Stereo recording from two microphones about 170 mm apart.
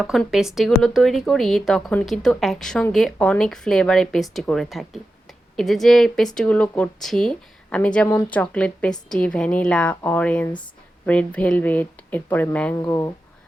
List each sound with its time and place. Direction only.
0.0 s speech: centre (ahead or behind); by 13.1 s 20° left (ahead or behind)